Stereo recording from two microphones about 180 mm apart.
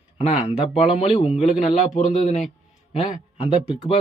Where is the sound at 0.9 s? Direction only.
30° left (ahead or behind).